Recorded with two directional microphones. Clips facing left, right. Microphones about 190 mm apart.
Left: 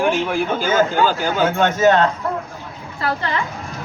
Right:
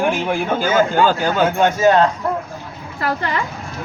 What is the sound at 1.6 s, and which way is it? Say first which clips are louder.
Speech: even; 10° right (ahead or behind).